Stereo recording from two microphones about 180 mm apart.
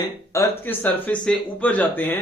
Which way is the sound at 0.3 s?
10° left (ahead or behind).